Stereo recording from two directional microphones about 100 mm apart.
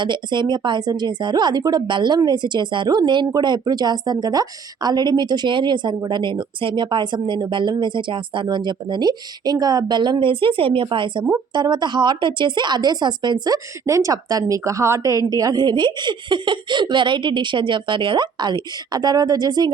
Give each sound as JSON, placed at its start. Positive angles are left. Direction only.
{"t": 0.0, "sound": "a woman's voice", "side_deg": -50}